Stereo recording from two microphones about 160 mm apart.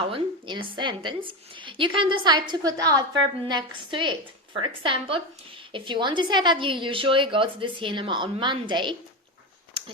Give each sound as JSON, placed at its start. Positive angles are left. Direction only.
{"t": 0.1, "sound": "a woman's voice", "side_deg": -30}